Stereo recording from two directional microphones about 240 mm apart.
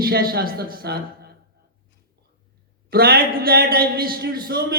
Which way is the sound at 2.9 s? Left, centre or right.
Right.